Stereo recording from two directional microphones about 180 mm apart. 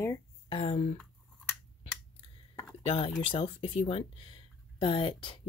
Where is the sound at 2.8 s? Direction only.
30° left (ahead or behind).